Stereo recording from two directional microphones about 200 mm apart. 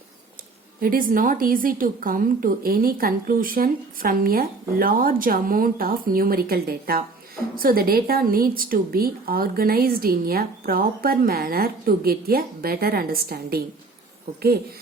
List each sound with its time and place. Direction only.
0.8 s a woman's voice: 45° right (ahead or behind)